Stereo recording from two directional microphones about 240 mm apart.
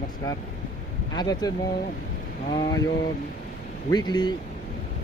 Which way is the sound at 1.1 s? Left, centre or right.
Centre.